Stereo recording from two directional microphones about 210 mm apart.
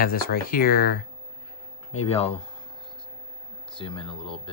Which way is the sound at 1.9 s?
30° left (ahead or behind).